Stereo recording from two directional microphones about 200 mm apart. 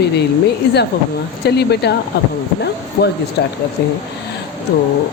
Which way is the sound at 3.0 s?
50° left (ahead or behind).